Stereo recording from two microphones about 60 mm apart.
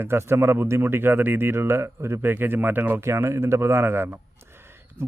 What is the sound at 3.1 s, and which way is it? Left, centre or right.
A man's voice, right.